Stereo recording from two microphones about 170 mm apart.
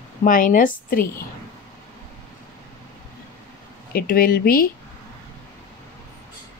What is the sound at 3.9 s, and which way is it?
Speech, 60° left (ahead or behind).